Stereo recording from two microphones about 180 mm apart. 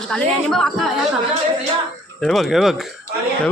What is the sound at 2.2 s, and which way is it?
Speech, centre (ahead or behind).